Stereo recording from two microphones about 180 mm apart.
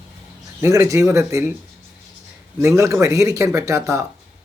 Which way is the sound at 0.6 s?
15° right (ahead or behind).